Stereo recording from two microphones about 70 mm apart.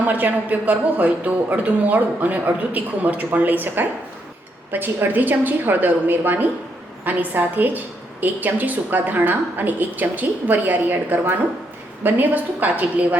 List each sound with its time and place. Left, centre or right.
0.0 s speech: right